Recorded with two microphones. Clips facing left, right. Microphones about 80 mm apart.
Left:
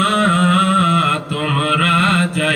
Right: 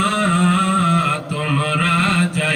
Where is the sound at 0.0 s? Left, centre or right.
Left.